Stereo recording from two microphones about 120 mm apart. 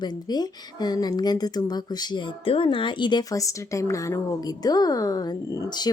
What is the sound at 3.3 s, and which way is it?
A woman's voice, 25° left (ahead or behind).